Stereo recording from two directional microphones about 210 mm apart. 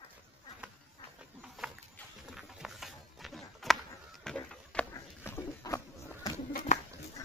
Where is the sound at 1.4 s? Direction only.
5° right (ahead or behind); by 5.8 s 10° left (ahead or behind).